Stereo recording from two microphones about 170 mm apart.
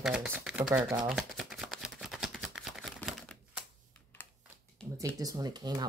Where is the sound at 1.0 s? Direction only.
Centre (ahead or behind).